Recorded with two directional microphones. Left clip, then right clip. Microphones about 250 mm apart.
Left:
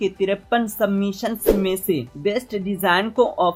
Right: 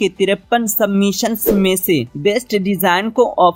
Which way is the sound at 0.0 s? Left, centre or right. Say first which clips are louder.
Right 6 dB; right.